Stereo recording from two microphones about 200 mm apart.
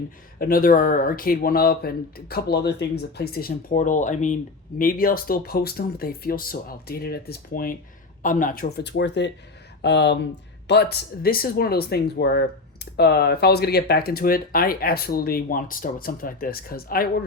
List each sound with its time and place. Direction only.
0.3 s speech: 45° left (ahead or behind)